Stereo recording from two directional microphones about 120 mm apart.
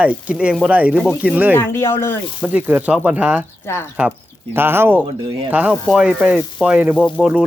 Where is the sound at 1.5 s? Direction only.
20° left (ahead or behind).